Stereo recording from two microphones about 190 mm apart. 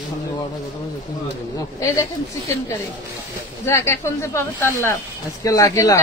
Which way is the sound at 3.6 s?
15° left (ahead or behind).